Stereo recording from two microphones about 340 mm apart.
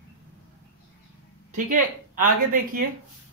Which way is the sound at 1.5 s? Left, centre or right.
Right.